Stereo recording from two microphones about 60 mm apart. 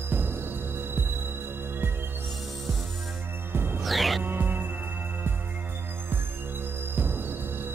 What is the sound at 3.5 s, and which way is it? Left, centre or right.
Music, right.